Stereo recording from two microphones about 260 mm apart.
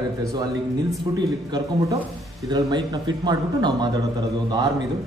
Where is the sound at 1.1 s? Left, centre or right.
Centre.